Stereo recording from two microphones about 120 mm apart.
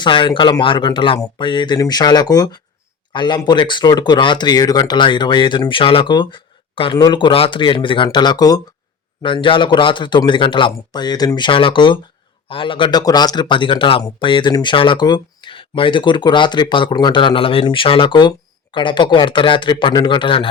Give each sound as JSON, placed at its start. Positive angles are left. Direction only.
{"t": 0.0, "sound": "speech", "side_deg": 40}
{"t": 9.2, "sound": "speech", "side_deg": 45}